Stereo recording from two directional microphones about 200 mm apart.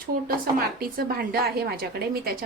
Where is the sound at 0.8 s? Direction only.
50° right (ahead or behind).